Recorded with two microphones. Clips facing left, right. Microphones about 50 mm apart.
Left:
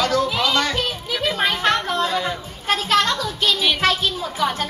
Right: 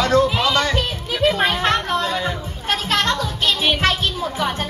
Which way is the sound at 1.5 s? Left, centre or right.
Right.